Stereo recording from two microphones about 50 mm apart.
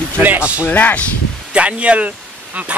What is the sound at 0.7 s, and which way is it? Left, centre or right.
Speech, left.